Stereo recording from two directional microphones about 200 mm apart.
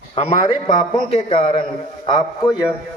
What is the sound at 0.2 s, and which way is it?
A man's voice, 30° left (ahead or behind).